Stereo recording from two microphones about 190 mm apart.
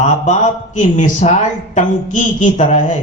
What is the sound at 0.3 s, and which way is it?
A man's voice, 40° left (ahead or behind).